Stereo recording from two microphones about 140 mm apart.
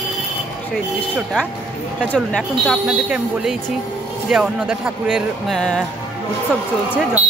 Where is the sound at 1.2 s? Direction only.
5° right (ahead or behind).